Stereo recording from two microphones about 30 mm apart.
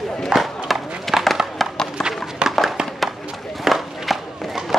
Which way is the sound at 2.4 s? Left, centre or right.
Right.